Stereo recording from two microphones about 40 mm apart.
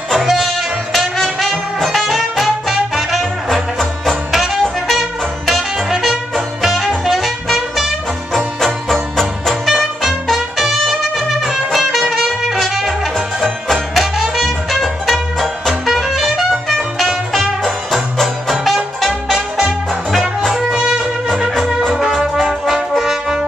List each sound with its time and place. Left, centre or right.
0.1 s music: centre
9.1 s music: centre
10.2 s brass instrument: centre
12.3 s music: centre
20.7 s wind instrument: centre
22.1 s brass instrument: centre